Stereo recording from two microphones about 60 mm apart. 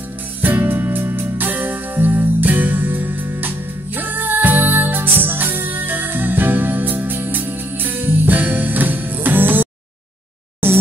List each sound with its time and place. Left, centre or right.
0.4 s music: right